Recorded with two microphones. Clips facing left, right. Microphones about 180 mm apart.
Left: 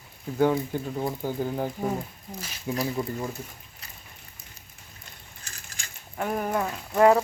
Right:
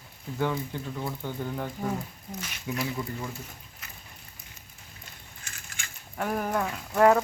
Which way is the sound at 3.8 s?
30° left (ahead or behind).